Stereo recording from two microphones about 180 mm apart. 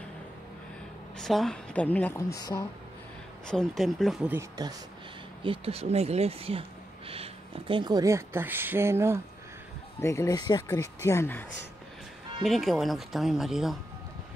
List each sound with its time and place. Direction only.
1.1 s speech: 5° left (ahead or behind); by 2.6 s 20° left (ahead or behind)
3.4 s speech: centre (ahead or behind)
4.4 s speech: 20° right (ahead or behind)
5.4 s speech: 30° right (ahead or behind); by 9.2 s 15° right (ahead or behind)
9.9 s speech: 15° left (ahead or behind)
12.4 s speech: centre (ahead or behind)